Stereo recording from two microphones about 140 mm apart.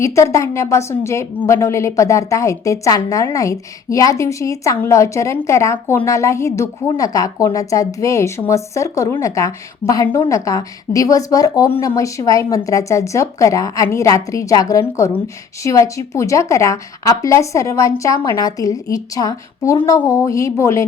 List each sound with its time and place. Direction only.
0.0 s a woman's voice: 20° left (ahead or behind)